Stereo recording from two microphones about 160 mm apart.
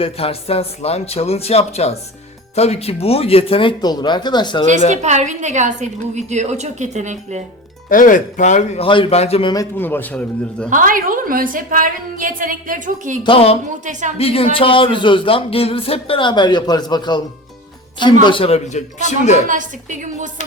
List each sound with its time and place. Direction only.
0.0 s speech: 40° left (ahead or behind)
4.9 s a woman's voice: 45° right (ahead or behind)
7.9 s a man's voice: 55° left (ahead or behind)
8.9 s speech: 35° left (ahead or behind)
9.7 s a man's voice: 10° left (ahead or behind)
10.7 s a woman's voice: 55° right (ahead or behind)
13.2 s a man's voice: 35° left (ahead or behind)
19.5 s a woman's voice: 50° right (ahead or behind)